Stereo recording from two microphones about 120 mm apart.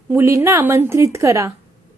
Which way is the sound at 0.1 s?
20° right (ahead or behind).